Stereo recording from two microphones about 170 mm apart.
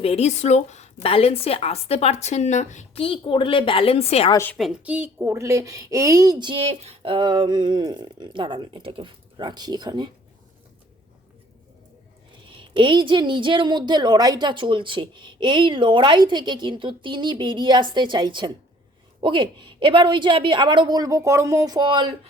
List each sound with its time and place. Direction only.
0.0 s a woman's voice: 40° left (ahead or behind)
4.5 s a woman's voice: 5° right (ahead or behind); by 10.1 s 25° right (ahead or behind)
12.5 s a woman's voice: 30° right (ahead or behind)